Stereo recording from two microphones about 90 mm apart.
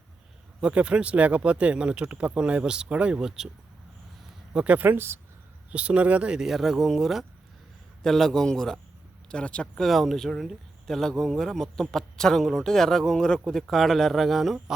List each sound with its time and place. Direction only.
0.6 s speech: 15° right (ahead or behind)
4.5 s speech: 15° right (ahead or behind)
5.7 s speech: 15° right (ahead or behind)